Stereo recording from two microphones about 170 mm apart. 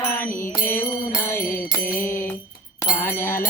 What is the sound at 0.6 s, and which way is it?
Mantra, 10° left (ahead or behind).